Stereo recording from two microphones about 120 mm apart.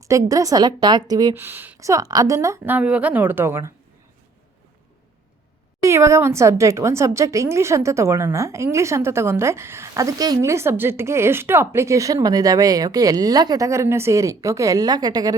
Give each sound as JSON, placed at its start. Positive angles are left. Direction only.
{"t": 0.0, "sound": "a woman's voice", "side_deg": -25}
{"t": 1.4, "sound": "speech", "side_deg": -15}
{"t": 1.8, "sound": "a woman's voice", "side_deg": -30}
{"t": 2.7, "sound": "speech", "side_deg": -10}
{"t": 5.8, "sound": "a woman's voice", "side_deg": -25}